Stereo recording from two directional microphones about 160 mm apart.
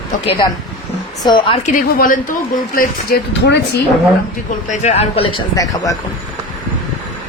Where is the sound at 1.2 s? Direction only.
30° left (ahead or behind).